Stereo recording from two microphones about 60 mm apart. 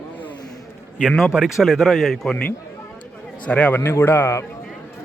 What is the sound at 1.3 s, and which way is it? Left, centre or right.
Speech, centre.